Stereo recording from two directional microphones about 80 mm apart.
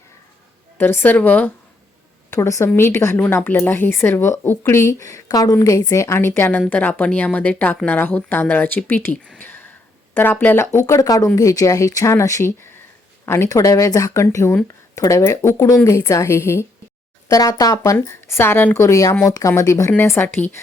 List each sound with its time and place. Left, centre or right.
0.8 s speech: left
2.3 s a woman's voice: left
9.4 s a sound: left
10.2 s a woman's voice: left
17.2 s speech: left
17.9 s a woman's voice: left
20.0 s speech: left